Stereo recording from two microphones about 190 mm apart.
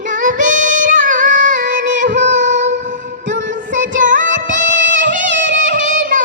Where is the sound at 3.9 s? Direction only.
45° right (ahead or behind).